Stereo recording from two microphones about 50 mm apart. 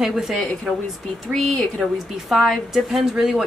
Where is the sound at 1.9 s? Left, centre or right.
Centre.